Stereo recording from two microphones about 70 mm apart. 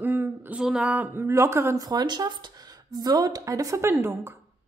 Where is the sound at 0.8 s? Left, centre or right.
Right.